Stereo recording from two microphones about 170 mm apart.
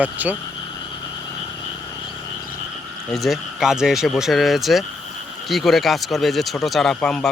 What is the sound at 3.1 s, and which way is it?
Speech, centre (ahead or behind).